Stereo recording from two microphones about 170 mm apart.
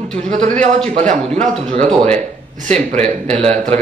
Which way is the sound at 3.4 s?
35° right (ahead or behind).